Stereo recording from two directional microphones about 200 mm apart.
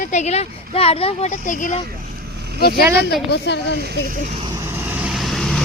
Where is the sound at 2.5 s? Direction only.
50° left (ahead or behind).